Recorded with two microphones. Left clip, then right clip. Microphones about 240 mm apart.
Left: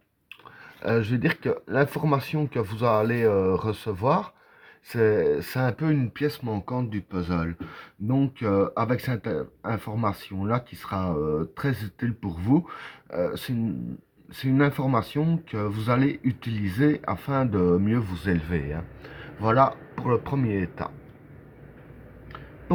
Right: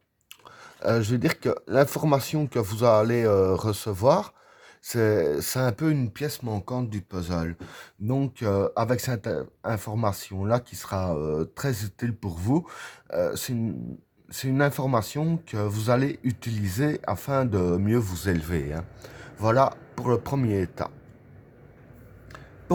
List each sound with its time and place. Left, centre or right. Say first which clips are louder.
0.8 s speech: right 1 dB; right